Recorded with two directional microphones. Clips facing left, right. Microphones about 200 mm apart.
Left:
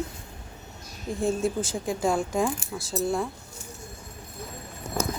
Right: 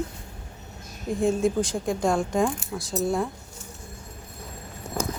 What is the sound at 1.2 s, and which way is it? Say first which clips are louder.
Speech: right 3 dB; centre (ahead or behind).